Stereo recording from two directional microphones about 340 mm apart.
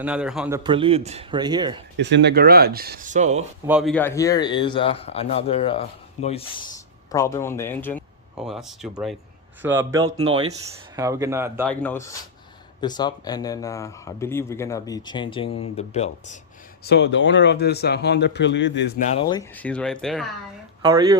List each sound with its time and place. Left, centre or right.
0.0 s a man's voice: centre
2.0 s speech: right
3.7 s a man's voice: centre
11.6 s speech: centre
16.8 s a man's voice: left; by 20.2 s centre
20.8 s a man's voice: centre